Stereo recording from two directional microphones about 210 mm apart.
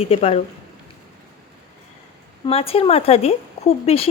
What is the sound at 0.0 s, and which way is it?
Speech, 25° left (ahead or behind).